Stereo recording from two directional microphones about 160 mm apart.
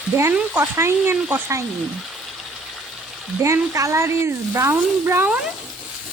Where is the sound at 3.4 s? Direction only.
15° right (ahead or behind).